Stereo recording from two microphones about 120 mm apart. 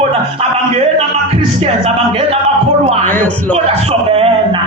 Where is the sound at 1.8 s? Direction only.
55° right (ahead or behind).